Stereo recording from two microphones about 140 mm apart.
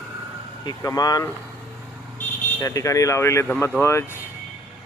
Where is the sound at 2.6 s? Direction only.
25° left (ahead or behind).